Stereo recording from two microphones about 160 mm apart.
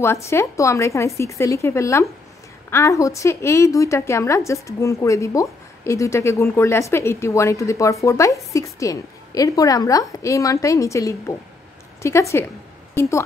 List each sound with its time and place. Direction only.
0.0 s a woman's voice: 15° left (ahead or behind)